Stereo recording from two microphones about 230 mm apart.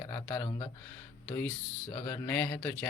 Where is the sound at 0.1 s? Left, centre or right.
Centre.